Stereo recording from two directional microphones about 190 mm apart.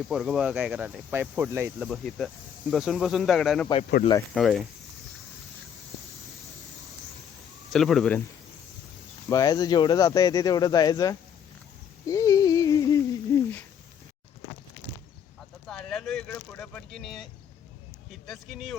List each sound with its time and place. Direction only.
0.1 s speech: 5° right (ahead or behind)
1.9 s speech: centre (ahead or behind)
7.7 s speech: centre (ahead or behind)
9.3 s speech: 20° left (ahead or behind)
12.0 s a sound: 15° left (ahead or behind)
15.6 s speech: 5° left (ahead or behind)